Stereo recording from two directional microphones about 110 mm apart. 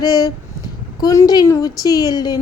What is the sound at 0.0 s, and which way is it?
A woman's voice, 35° left (ahead or behind).